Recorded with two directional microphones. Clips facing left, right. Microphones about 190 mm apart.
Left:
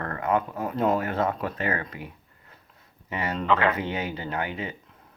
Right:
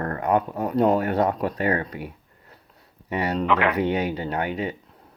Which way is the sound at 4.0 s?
35° right (ahead or behind).